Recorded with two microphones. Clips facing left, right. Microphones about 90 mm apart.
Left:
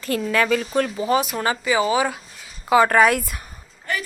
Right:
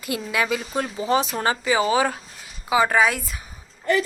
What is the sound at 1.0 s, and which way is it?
Speech, 30° right (ahead or behind).